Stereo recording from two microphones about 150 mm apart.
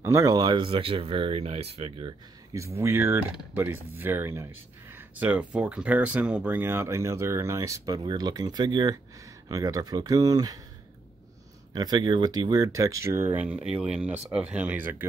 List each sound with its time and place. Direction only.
0.0 s speech: 20° right (ahead or behind); by 2.1 s 40° right (ahead or behind)
2.5 s speech: 20° right (ahead or behind)
11.7 s speech: 30° right (ahead or behind); by 15.0 s 10° right (ahead or behind)